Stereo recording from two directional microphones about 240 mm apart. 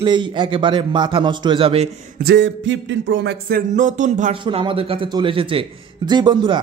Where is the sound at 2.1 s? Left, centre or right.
Right; by 6.6 s centre.